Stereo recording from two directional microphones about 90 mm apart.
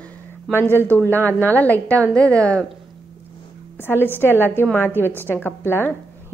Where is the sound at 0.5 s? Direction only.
25° left (ahead or behind).